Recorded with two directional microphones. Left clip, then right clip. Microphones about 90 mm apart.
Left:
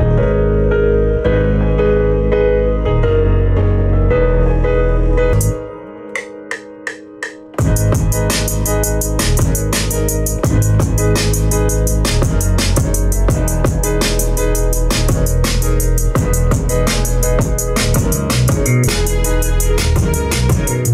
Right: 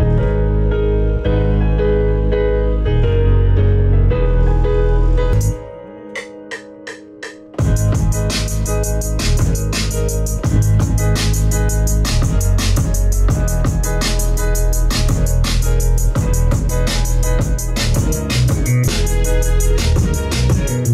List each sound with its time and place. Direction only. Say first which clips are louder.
0.7 s music: left 5 dB; 30° left (ahead or behind)
11.0 s music: left 6 dB; 35° left (ahead or behind)